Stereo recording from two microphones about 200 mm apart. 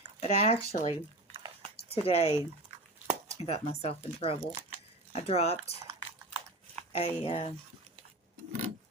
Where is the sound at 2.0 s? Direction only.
30° left (ahead or behind).